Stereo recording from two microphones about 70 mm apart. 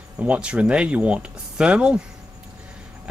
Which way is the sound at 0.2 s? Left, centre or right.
Centre.